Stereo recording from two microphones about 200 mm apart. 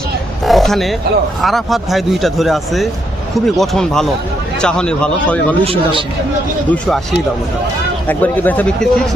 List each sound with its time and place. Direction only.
0.4 s oink: centre (ahead or behind)
1.4 s speech: centre (ahead or behind)
5.6 s speech: 25° right (ahead or behind)
6.7 s speech: 5° left (ahead or behind)
8.0 s speech: 10° left (ahead or behind)